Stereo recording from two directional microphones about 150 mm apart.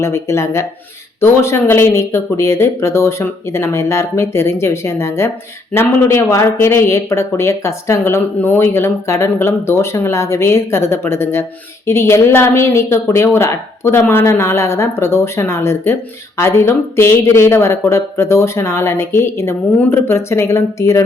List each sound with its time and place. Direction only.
0.0 s speech: 20° left (ahead or behind)